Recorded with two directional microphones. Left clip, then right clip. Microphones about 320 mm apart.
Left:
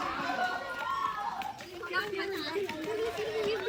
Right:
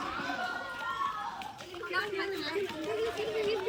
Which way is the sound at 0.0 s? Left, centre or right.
Left.